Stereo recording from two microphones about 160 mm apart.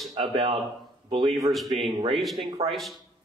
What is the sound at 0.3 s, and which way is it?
Speech, 30° right (ahead or behind).